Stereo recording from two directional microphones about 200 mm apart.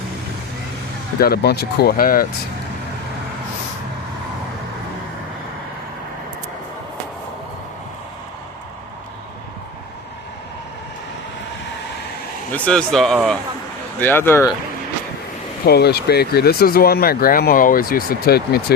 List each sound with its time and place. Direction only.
1.2 s speech: 55° left (ahead or behind)
12.5 s speech: 5° left (ahead or behind)
15.6 s speech: 55° left (ahead or behind)